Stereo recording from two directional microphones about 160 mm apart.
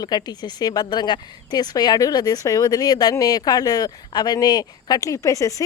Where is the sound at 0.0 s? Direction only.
25° left (ahead or behind).